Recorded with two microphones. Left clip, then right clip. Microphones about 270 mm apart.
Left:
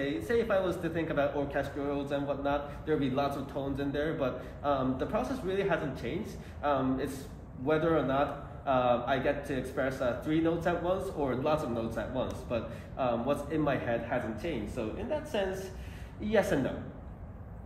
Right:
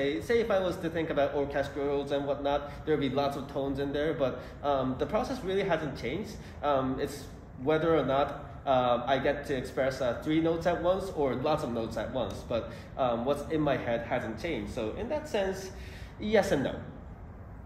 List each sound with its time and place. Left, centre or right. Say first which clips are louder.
0.0 s a man's voice: right 2 dB; right